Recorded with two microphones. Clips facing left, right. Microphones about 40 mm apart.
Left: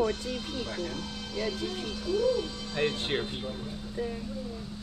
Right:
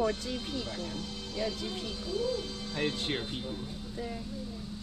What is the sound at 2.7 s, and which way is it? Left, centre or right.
Speech, left.